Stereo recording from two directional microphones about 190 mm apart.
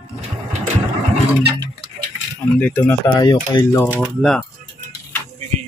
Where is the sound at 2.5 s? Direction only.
10° left (ahead or behind).